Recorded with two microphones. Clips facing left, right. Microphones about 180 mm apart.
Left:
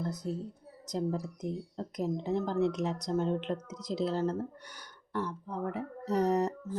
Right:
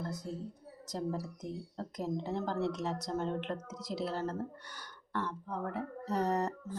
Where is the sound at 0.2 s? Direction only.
20° left (ahead or behind).